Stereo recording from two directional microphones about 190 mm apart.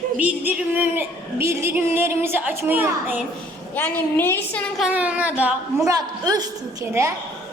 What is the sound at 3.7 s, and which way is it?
A woman's voice, 10° left (ahead or behind).